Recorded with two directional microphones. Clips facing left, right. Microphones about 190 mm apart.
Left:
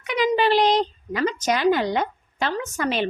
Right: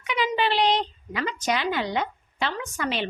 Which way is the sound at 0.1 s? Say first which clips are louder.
Left 5 dB; 40° left (ahead or behind).